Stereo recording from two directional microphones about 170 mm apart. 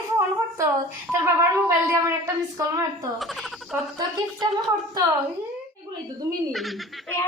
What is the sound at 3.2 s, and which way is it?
Speech, centre (ahead or behind).